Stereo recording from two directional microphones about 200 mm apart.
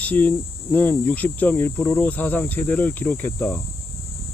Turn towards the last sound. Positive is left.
turn(degrees=10)  # may be behind; listen again after turning